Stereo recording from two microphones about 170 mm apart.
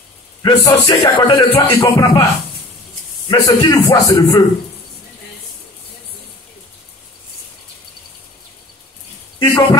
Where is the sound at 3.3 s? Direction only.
25° left (ahead or behind).